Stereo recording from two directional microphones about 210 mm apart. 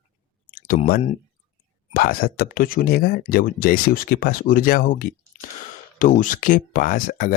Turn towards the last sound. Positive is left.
turn(degrees=40)  # may be behind; listen again after turning